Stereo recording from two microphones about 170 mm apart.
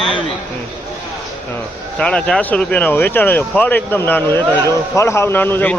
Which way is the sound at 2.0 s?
5° left (ahead or behind).